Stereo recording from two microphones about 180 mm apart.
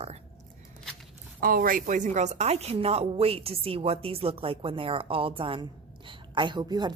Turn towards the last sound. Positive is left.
turn(degrees=-25)  # may be behind; listen again after turning